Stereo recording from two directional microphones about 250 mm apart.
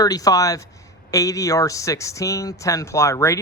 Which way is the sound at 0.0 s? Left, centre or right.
Centre.